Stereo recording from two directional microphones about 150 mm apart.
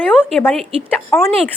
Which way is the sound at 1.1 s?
15° left (ahead or behind).